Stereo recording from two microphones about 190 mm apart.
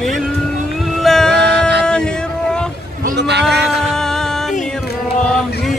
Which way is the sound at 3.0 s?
60° right (ahead or behind).